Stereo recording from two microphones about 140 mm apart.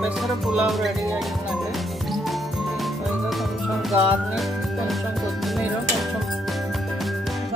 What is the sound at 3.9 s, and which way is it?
Speech, 10° right (ahead or behind).